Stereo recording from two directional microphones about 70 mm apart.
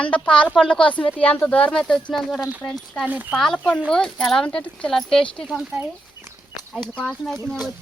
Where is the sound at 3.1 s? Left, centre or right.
Right.